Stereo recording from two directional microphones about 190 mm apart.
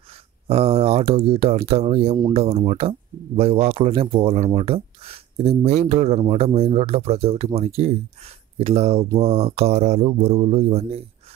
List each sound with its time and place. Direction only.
0.5 s speech: 30° right (ahead or behind)